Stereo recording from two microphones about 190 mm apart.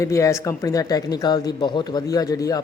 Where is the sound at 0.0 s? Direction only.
15° left (ahead or behind).